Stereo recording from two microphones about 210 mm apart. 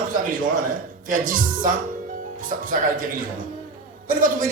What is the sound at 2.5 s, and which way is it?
Speech, 40° right (ahead or behind).